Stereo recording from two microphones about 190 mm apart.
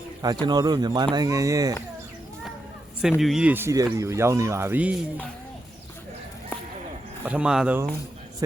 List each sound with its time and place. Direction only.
0.2 s speech: 20° right (ahead or behind)
3.0 s speech: centre (ahead or behind)
7.3 s speech: 5° right (ahead or behind)